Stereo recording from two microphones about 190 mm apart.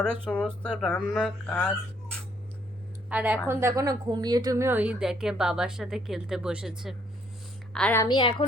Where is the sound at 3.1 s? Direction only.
10° right (ahead or behind).